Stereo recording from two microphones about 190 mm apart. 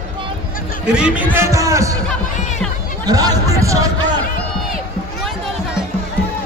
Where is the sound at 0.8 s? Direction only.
5° right (ahead or behind).